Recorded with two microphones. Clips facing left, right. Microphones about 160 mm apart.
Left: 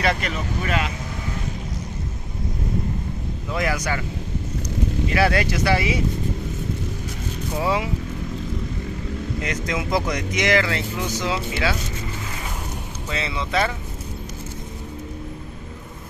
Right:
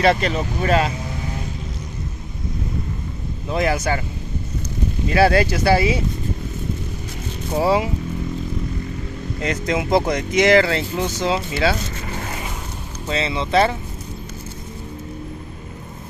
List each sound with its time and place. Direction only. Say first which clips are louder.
0.0 s speech: right 6 dB; 30° right (ahead or behind)
3.4 s speech: right 4 dB; 25° right (ahead or behind)
5.1 s speech: right 6 dB; 30° right (ahead or behind)
7.5 s speech: right 5 dB; 30° right (ahead or behind)
9.4 s speech: right 7 dB; 30° right (ahead or behind)
13.1 s speech: right 6 dB; 25° right (ahead or behind)